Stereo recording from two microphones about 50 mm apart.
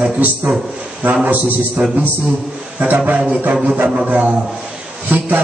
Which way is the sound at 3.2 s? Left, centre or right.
Right.